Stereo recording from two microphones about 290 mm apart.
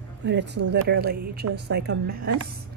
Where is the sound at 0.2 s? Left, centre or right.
Right.